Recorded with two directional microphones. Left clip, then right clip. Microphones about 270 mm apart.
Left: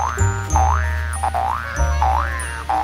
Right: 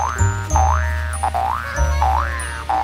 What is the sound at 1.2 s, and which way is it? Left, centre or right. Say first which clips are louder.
Boing: right 1 dB; centre.